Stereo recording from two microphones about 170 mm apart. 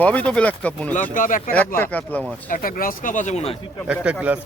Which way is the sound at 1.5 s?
10° left (ahead or behind).